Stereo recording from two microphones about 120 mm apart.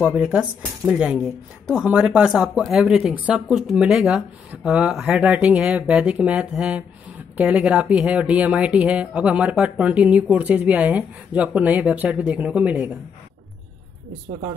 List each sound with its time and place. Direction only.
0.0 s speech: 5° right (ahead or behind)